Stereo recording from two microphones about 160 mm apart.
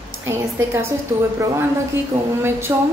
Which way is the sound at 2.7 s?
20° right (ahead or behind).